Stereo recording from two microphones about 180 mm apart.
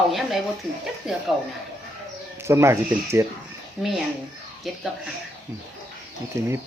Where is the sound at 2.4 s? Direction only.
15° right (ahead or behind).